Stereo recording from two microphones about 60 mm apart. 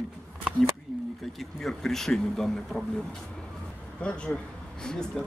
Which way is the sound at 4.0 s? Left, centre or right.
Centre.